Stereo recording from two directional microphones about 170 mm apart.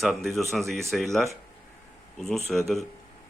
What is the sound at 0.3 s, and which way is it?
Speech, centre (ahead or behind).